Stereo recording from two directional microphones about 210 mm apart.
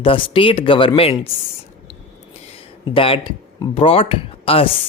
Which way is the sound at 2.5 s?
25° left (ahead or behind).